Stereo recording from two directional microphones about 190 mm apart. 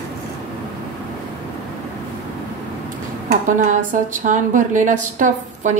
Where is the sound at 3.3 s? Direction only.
40° right (ahead or behind).